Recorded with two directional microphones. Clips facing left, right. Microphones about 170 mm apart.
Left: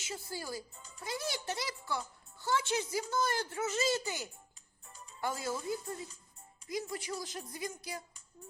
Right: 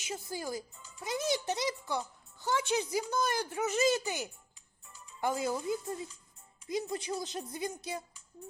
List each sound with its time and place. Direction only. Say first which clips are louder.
0.0 s a woman's voice: right 4 dB; 15° right (ahead or behind)